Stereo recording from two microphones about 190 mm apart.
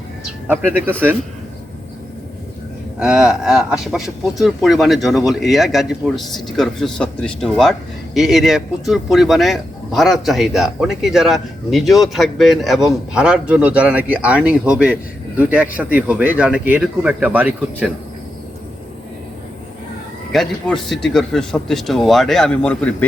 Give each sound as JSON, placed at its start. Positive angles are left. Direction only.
{"t": 0.4, "sound": "speech", "side_deg": -10}
{"t": 3.0, "sound": "speech", "side_deg": -5}
{"t": 20.3, "sound": "speech", "side_deg": 0}